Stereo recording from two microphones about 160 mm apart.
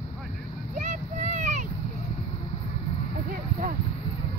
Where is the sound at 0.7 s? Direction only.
50° right (ahead or behind).